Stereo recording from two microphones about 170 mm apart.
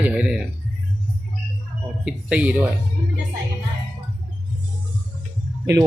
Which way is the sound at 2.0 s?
5° right (ahead or behind).